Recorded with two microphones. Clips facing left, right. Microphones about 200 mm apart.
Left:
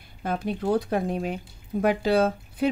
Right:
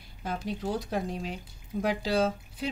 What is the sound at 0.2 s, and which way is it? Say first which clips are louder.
Speech: left 5 dB; 55° left (ahead or behind).